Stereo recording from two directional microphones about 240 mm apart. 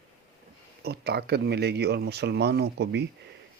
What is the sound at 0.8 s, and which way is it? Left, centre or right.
Speech, right.